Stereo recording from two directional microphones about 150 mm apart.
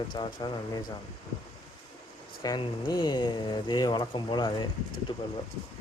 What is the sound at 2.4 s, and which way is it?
Speech, 30° left (ahead or behind).